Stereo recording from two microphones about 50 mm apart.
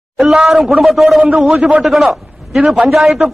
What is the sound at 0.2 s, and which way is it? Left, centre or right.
A man's voice, centre.